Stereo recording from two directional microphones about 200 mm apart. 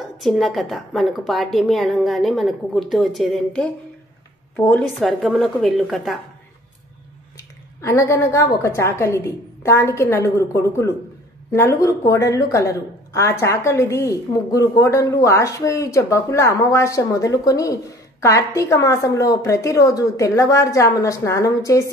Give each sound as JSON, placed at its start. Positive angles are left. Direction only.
{"t": 0.2, "sound": "a woman's voice", "side_deg": 0}
{"t": 7.3, "sound": "a woman's voice", "side_deg": 15}